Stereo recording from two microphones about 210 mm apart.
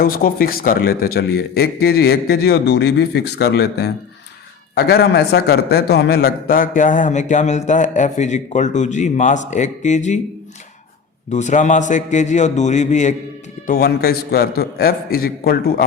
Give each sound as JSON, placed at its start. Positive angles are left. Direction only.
{"t": 0.0, "sound": "a man's voice", "side_deg": 45}
{"t": 11.3, "sound": "a man's voice", "side_deg": 35}
{"t": 13.7, "sound": "a man's voice", "side_deg": 45}